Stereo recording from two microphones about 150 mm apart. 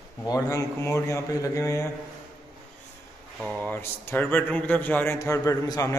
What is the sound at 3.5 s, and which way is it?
Speech, 10° left (ahead or behind).